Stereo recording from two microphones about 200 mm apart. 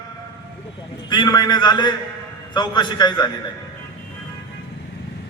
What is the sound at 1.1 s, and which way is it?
A man's voice, 20° left (ahead or behind).